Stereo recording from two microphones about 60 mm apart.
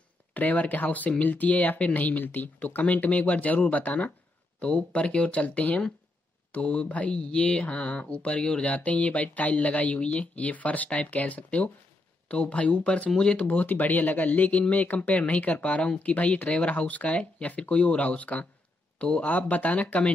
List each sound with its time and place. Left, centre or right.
0.3 s speech: left